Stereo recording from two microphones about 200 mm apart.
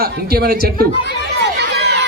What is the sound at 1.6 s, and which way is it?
Crowd, 55° right (ahead or behind).